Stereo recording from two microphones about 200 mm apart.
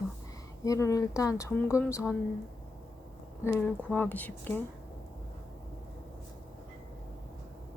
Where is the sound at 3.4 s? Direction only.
10° left (ahead or behind).